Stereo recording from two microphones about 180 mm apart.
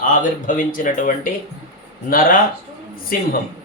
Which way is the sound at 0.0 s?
50° left (ahead or behind).